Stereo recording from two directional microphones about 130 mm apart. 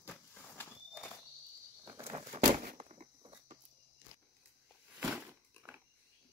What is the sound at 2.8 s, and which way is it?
Walk, 50° right (ahead or behind).